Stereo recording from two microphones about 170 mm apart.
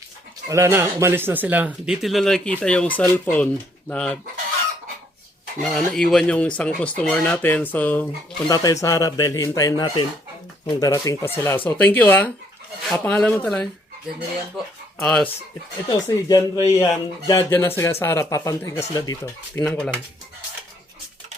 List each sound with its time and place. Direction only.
0.4 s speech: 15° right (ahead or behind); by 4.2 s 5° left (ahead or behind)
5.6 s speech: centre (ahead or behind)
8.4 s speech: 20° left (ahead or behind)
15.0 s speech: 5° left (ahead or behind)
15.9 s speech: 20° left (ahead or behind)
19.6 s speech: 5° left (ahead or behind)